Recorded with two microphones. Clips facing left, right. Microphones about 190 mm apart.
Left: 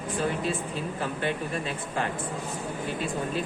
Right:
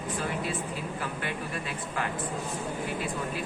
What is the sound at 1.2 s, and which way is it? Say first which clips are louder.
Speech: left 5 dB; 25° left (ahead or behind).